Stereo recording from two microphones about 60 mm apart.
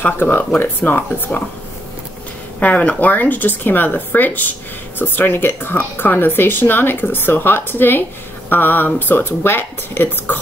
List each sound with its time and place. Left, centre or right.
0.0 s speech: left
2.6 s speech: left